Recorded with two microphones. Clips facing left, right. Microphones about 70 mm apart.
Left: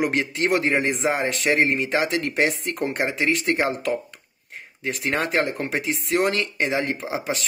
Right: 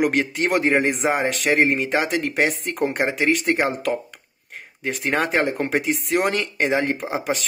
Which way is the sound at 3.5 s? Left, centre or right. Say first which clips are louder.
Right 1 dB; centre.